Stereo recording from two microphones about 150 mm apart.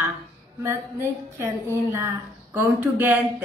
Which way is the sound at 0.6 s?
15° right (ahead or behind).